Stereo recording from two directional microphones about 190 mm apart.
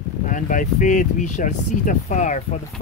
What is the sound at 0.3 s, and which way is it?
Speech, 45° left (ahead or behind).